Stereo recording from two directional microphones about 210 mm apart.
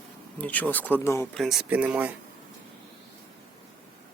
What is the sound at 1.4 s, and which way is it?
Speech, centre (ahead or behind).